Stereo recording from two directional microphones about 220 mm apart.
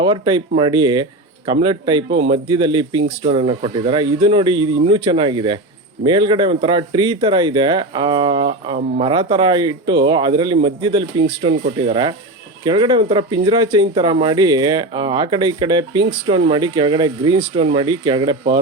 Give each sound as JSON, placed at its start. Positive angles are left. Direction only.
{"t": 0.0, "sound": "speech", "side_deg": -20}